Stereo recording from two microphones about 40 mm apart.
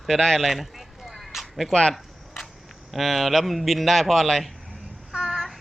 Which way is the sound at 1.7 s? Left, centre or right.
Centre.